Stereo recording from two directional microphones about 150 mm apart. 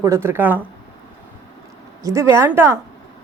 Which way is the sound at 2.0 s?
20° right (ahead or behind).